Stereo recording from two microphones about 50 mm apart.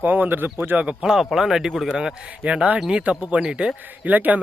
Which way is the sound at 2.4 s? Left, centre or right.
Right.